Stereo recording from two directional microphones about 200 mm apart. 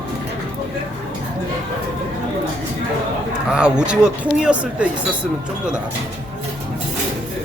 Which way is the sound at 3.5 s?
5° right (ahead or behind).